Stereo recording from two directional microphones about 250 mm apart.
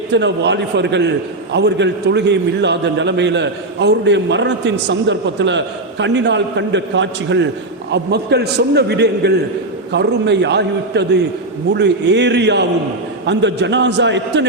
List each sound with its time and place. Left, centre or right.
0.1 s a man's voice: right